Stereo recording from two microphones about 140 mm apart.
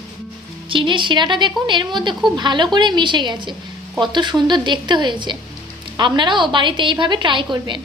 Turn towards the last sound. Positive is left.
turn(degrees=-35)  # may be behind; listen again after turning